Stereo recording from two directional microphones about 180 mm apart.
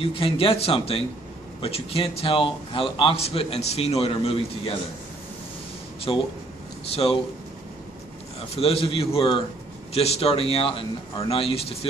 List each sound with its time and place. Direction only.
0.0 s a man's voice: 30° left (ahead or behind)
6.1 s a man's voice: 25° left (ahead or behind)
8.5 s a man's voice: 30° left (ahead or behind)